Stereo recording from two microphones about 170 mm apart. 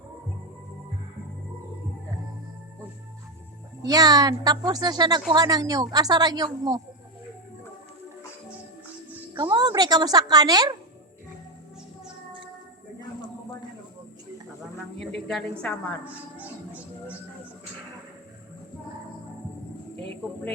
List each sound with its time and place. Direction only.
3.8 s speech: 20° right (ahead or behind)
9.3 s speech: 30° right (ahead or behind)
14.9 s a woman's voice: centre (ahead or behind)
16.0 s music: 10° right (ahead or behind)